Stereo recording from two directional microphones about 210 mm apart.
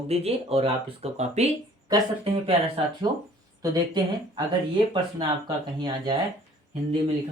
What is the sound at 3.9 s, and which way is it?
Speech, 20° right (ahead or behind).